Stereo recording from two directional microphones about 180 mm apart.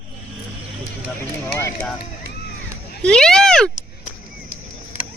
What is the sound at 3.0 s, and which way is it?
Speech, 5° left (ahead or behind).